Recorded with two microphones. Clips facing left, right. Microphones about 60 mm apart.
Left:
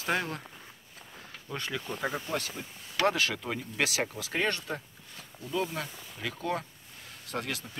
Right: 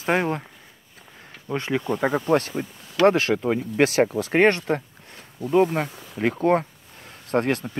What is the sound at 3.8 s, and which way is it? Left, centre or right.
Speech, right.